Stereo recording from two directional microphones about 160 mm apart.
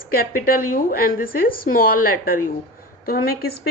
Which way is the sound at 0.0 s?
65° left (ahead or behind).